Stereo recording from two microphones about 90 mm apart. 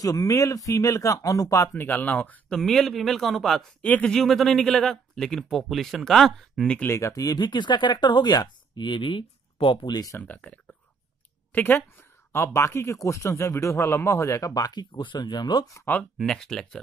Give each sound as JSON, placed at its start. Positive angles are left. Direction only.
{"t": 0.0, "sound": "speech", "side_deg": 40}
{"t": 1.7, "sound": "speech", "side_deg": 20}
{"t": 2.5, "sound": "speech", "side_deg": 5}
{"t": 4.2, "sound": "speech", "side_deg": 0}
{"t": 6.9, "sound": "speech", "side_deg": 35}
{"t": 9.8, "sound": "speech", "side_deg": 45}
{"t": 10.1, "sound": "speech", "side_deg": 15}
{"t": 11.5, "sound": "a sound", "side_deg": 20}
{"t": 12.5, "sound": "speech", "side_deg": 30}
{"t": 14.5, "sound": "speech", "side_deg": 50}
{"t": 16.2, "sound": "speech", "side_deg": 5}